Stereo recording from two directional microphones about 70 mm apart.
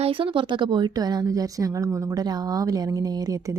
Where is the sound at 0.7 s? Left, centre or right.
Right.